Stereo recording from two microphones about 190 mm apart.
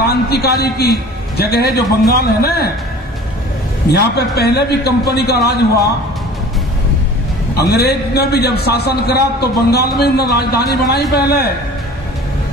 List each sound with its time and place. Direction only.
0.0 s a man's voice: 55° left (ahead or behind)
3.9 s a man's voice: 60° left (ahead or behind)
7.5 s a man's voice: 55° left (ahead or behind)